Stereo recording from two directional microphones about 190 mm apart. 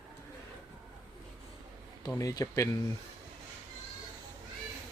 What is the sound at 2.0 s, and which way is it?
Speech, 20° left (ahead or behind).